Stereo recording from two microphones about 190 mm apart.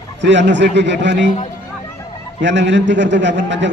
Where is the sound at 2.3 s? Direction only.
65° right (ahead or behind).